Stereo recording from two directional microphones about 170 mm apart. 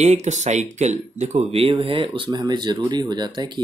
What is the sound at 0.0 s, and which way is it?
Speech, 40° right (ahead or behind).